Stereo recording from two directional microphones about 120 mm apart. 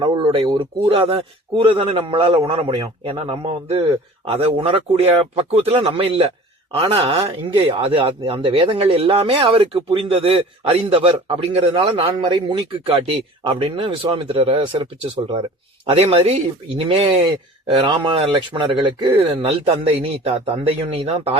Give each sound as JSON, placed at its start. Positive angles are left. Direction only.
{"t": 0.3, "sound": "speech", "side_deg": -40}
{"t": 15.9, "sound": "speech", "side_deg": -55}
{"t": 17.7, "sound": "speech", "side_deg": -45}